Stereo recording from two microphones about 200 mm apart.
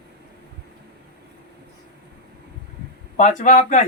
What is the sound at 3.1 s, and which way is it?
Speech, 35° left (ahead or behind).